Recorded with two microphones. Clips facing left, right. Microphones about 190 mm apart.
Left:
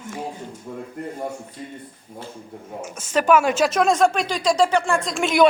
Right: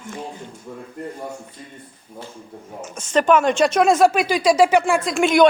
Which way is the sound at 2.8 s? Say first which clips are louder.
Right 2 dB; 5° left (ahead or behind).